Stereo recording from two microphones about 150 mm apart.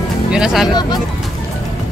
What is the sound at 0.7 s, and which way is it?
Speech, 30° left (ahead or behind).